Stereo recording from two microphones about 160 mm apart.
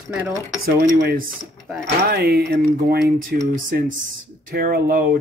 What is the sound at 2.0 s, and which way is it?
Speech, 70° right (ahead or behind).